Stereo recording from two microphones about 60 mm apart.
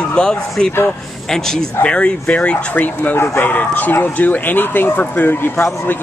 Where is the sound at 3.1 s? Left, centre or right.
Left.